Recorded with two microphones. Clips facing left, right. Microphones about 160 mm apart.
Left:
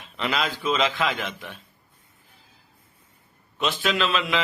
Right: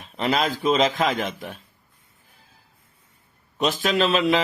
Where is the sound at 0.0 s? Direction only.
40° right (ahead or behind).